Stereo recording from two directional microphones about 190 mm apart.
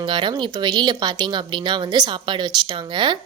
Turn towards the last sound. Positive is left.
turn(degrees=-25)  # may be behind; listen again after turning